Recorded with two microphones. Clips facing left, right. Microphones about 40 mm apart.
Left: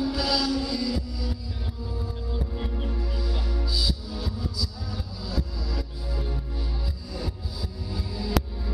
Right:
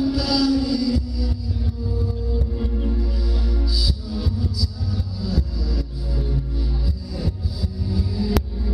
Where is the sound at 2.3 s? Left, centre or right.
Left.